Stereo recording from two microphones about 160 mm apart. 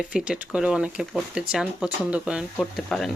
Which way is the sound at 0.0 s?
5° right (ahead or behind).